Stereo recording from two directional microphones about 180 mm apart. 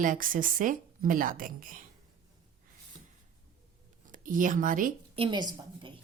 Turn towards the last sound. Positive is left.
turn(degrees=-25)  # may be behind; listen again after turning